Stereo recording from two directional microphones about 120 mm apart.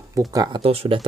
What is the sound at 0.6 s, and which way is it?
Speech, 55° right (ahead or behind).